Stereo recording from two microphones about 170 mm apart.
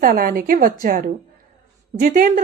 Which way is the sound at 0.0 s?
55° right (ahead or behind).